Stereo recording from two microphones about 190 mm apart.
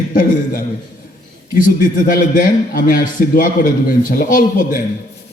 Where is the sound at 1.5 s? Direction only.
50° left (ahead or behind).